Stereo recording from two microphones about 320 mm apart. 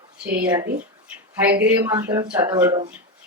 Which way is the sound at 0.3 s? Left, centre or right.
Centre.